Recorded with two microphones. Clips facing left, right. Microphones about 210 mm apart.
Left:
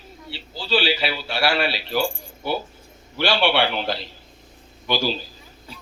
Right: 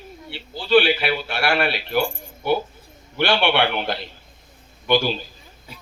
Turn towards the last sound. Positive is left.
turn(degrees=-55)  # may be behind; listen again after turning